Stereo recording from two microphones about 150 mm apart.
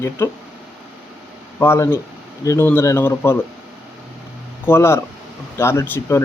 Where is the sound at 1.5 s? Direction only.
15° left (ahead or behind).